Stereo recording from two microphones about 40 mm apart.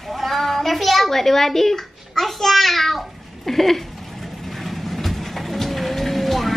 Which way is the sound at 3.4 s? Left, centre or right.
Centre.